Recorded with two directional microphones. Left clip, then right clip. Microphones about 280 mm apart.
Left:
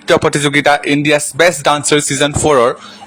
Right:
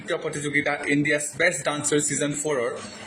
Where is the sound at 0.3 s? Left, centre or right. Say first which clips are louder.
Left 14 dB; left.